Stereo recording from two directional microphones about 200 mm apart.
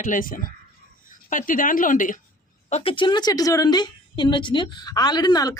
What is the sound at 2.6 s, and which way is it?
A woman's voice, 30° left (ahead or behind).